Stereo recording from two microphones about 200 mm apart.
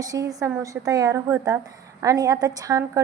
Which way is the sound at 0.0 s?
15° right (ahead or behind).